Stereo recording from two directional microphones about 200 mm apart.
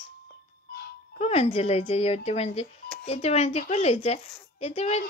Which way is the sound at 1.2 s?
30° left (ahead or behind).